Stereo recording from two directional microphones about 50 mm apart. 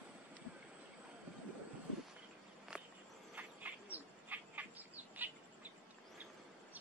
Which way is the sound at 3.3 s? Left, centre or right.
Right.